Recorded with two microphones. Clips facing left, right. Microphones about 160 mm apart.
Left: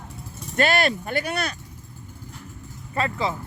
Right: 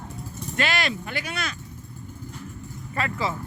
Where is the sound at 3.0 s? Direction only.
25° left (ahead or behind).